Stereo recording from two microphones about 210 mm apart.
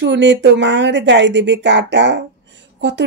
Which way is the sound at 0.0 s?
55° right (ahead or behind).